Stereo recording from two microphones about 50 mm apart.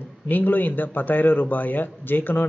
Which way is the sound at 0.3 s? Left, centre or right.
Left.